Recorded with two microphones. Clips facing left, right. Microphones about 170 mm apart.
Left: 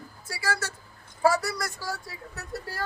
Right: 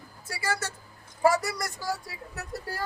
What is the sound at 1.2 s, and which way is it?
Speech, 15° right (ahead or behind).